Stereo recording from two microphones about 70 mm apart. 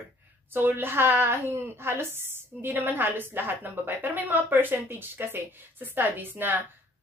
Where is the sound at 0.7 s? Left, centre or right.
Right.